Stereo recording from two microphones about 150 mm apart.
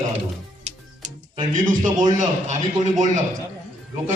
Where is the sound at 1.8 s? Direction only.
55° right (ahead or behind).